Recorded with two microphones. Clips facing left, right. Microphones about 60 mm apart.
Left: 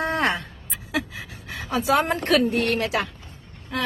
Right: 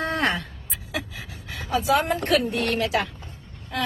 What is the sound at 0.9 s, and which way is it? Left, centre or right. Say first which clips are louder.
Speech: left 4 dB; left.